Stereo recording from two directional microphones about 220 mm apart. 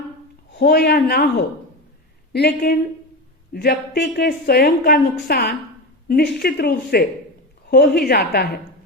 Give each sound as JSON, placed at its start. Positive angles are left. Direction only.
{"t": 0.5, "sound": "a woman's voice", "side_deg": 45}